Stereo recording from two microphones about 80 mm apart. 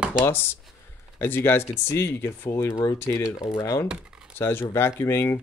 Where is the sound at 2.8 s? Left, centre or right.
Left.